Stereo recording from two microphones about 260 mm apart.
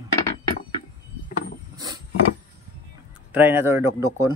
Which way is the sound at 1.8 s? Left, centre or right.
Centre.